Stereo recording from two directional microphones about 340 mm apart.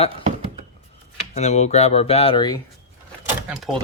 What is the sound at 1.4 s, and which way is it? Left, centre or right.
Speech, centre.